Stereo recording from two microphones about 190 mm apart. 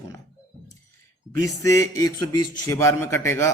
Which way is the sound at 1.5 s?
15° left (ahead or behind).